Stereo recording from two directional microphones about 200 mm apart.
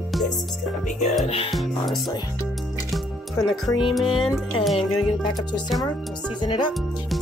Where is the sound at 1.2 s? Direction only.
30° left (ahead or behind).